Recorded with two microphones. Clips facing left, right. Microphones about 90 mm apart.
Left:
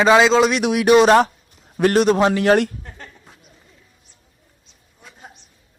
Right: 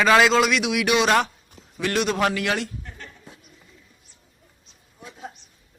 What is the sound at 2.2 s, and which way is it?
Speech, 25° left (ahead or behind).